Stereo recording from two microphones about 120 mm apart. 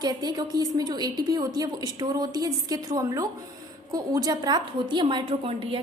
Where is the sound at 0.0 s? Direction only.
35° right (ahead or behind).